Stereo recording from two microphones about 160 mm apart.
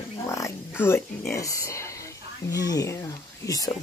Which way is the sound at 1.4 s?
20° left (ahead or behind).